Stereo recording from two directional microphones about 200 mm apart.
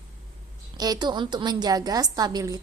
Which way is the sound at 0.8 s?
20° right (ahead or behind).